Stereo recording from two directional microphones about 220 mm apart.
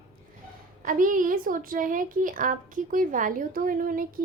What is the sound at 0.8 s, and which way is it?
A woman's voice, 40° right (ahead or behind).